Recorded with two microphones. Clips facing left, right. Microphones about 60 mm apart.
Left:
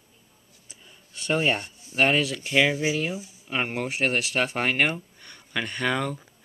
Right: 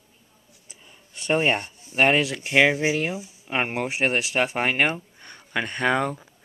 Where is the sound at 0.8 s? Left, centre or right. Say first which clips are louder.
Right 3 dB; right.